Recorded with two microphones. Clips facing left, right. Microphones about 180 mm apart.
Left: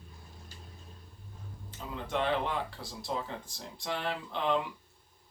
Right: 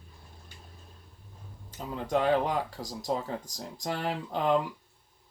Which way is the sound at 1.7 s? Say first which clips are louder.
Right 6 dB; 40° right (ahead or behind).